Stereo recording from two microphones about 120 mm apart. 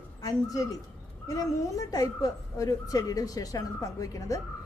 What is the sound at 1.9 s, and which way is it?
A woman's voice, 30° left (ahead or behind).